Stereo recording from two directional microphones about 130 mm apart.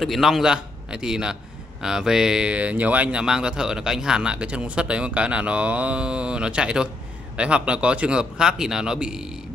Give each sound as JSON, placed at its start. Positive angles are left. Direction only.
{"t": 0.0, "sound": "a man's voice", "side_deg": 0}